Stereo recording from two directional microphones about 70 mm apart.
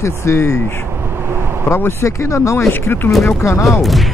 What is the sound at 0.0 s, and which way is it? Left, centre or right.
Speech, left.